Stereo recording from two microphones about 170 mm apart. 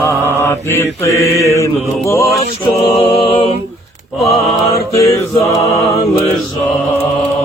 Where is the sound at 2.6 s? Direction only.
30° left (ahead or behind).